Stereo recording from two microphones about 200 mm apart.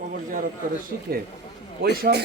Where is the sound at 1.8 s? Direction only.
50° right (ahead or behind).